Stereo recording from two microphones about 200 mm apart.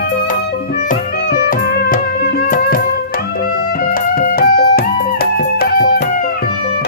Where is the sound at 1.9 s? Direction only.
45° left (ahead or behind).